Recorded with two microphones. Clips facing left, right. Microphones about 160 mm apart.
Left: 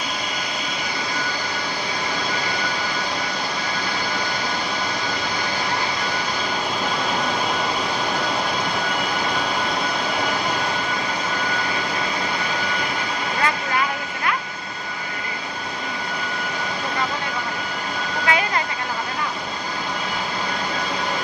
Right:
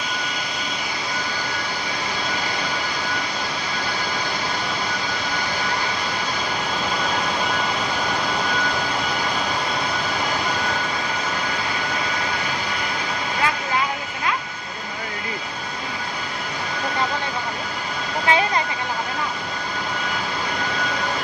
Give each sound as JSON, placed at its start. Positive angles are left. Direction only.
{"t": 18.3, "sound": "vehicle", "side_deg": -25}